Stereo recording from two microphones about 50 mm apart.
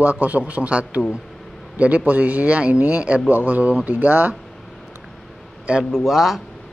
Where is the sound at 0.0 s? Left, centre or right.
Right.